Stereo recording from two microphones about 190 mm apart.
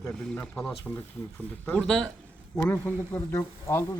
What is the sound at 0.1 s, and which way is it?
A man's voice, 5° left (ahead or behind).